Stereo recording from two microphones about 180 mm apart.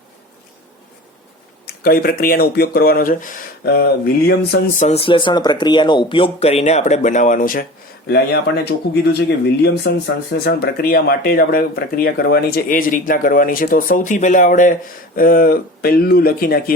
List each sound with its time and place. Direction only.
1.6 s speech: 60° left (ahead or behind)
3.6 s speech: 60° left (ahead or behind)
4.8 s speech: 35° left (ahead or behind); by 7.6 s 50° left (ahead or behind)
8.0 s speech: 65° left (ahead or behind)